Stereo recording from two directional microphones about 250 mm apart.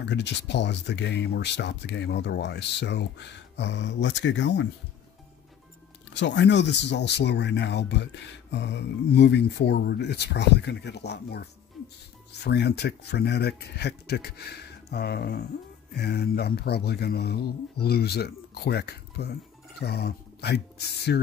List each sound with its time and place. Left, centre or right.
0.0 s speech: left
6.1 s speech: left